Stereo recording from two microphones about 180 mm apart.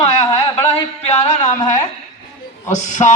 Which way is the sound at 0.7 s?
40° left (ahead or behind).